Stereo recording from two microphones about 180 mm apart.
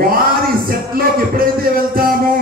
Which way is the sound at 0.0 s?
55° right (ahead or behind).